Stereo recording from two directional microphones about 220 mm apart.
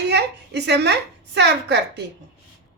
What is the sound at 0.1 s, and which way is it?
A woman's voice, 50° right (ahead or behind).